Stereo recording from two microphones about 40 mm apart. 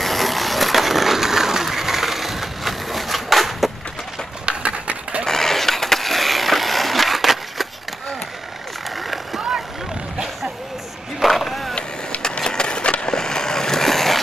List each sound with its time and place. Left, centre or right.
0.0 s a sound: centre
4.5 s a sound: right
5.2 s skateboard: centre
9.0 s vehicle: centre
11.1 s vehicle: centre
12.2 s skateboard: centre